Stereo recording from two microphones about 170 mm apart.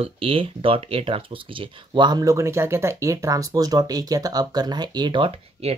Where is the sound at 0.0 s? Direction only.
35° right (ahead or behind).